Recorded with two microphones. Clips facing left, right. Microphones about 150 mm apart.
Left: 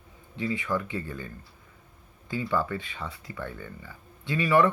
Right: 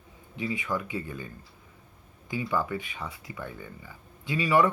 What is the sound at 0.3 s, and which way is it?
Speech, 20° right (ahead or behind).